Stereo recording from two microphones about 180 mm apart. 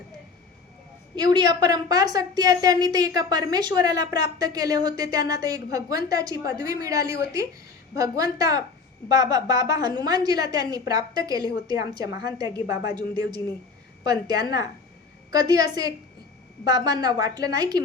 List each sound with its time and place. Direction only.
1.1 s a woman's voice: 25° right (ahead or behind)